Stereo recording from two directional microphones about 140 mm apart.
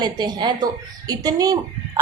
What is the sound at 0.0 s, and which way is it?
A woman's voice, 30° right (ahead or behind).